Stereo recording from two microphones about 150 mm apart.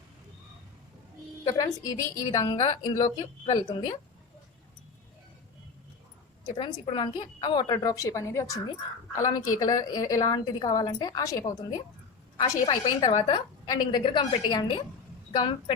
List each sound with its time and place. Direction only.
1.5 s a woman's voice: 20° left (ahead or behind)
6.6 s a woman's voice: 25° left (ahead or behind)